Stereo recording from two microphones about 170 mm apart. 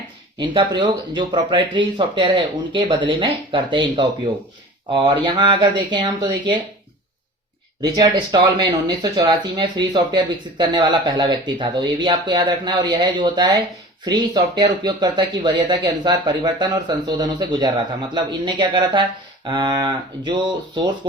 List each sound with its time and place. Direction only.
0.3 s speech: 25° right (ahead or behind)
7.8 s speech: 25° right (ahead or behind)